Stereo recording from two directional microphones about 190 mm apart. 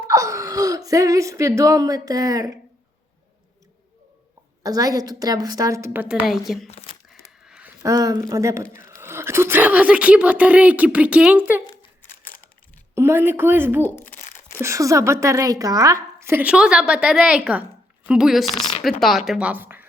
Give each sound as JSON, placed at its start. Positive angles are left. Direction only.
{"t": 0.0, "sound": "speech", "side_deg": -15}
{"t": 4.6, "sound": "a woman's voice", "side_deg": -20}
{"t": 6.7, "sound": "speech", "side_deg": 35}
{"t": 7.1, "sound": "a sound", "side_deg": -5}
{"t": 7.8, "sound": "a woman's voice", "side_deg": -20}
{"t": 12.9, "sound": "speech", "side_deg": -10}
{"t": 13.8, "sound": "a sound", "side_deg": 10}
{"t": 14.6, "sound": "a woman's voice", "side_deg": -15}